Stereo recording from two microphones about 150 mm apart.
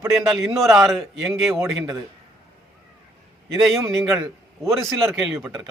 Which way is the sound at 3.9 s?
5° right (ahead or behind).